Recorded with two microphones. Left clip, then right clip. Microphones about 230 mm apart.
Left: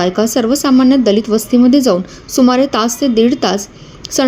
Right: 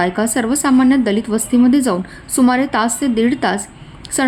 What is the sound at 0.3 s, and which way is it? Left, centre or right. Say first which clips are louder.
Speech: left 2 dB; centre.